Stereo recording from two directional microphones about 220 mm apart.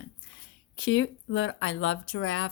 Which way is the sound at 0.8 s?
60° left (ahead or behind).